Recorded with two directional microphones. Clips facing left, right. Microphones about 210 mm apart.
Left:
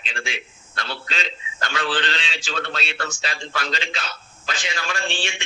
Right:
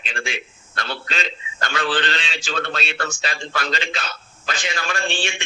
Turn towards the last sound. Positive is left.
turn(degrees=-50)  # may be behind; listen again after turning